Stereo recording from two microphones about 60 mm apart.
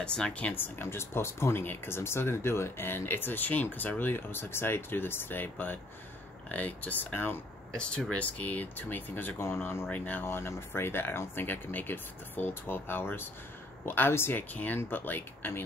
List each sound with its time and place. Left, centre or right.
0.0 s speech: centre
0.6 s speech: left
9.8 s speech: left
14.5 s speech: left